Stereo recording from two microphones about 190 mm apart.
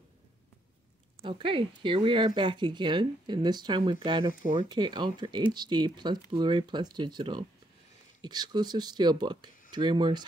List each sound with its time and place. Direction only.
1.2 s speech: 25° right (ahead or behind)